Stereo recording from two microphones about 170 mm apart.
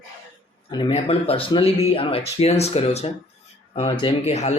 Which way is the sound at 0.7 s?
30° left (ahead or behind).